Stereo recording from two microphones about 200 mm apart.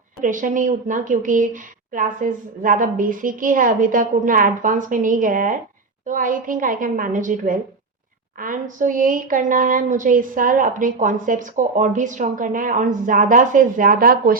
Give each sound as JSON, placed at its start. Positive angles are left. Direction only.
{"t": 0.2, "sound": "a woman's voice", "side_deg": -40}